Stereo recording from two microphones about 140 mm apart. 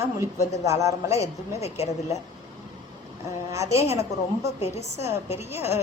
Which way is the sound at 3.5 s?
20° right (ahead or behind).